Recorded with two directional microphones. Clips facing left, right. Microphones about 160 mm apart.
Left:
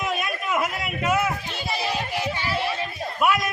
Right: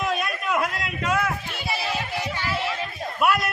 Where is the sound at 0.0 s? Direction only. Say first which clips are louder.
Right 1 dB; centre (ahead or behind).